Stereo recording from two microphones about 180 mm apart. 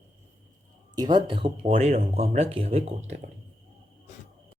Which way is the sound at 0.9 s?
25° right (ahead or behind).